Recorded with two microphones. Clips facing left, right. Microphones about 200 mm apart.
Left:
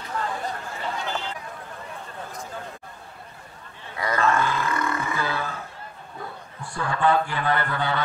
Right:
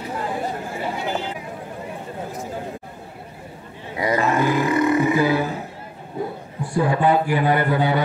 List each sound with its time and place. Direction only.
0.0 s a sound: 15° right (ahead or behind)
3.9 s roar: 15° right (ahead or behind)
6.7 s a man's voice: 15° right (ahead or behind)